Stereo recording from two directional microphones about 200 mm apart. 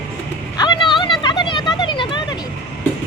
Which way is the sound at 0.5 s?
20° left (ahead or behind).